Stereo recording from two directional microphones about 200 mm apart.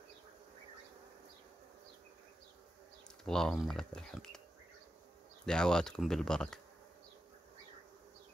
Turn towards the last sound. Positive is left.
turn(degrees=5)  # may be behind; listen again after turning